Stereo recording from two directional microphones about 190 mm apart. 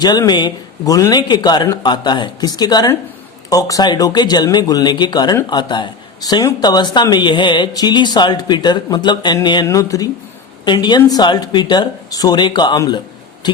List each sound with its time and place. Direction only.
0.0 s speech: 20° left (ahead or behind)